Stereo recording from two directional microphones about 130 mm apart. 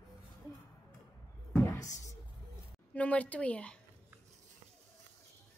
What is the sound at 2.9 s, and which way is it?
Speech, 10° left (ahead or behind).